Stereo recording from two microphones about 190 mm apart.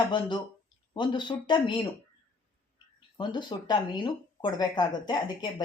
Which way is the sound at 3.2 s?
25° left (ahead or behind).